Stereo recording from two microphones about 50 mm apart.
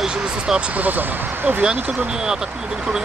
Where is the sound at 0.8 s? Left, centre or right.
Right.